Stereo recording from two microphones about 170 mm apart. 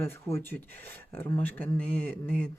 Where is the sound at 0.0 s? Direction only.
15° left (ahead or behind).